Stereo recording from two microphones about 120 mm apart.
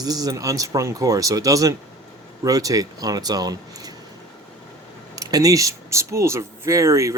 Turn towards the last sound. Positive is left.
turn(degrees=-25)  # may be behind; listen again after turning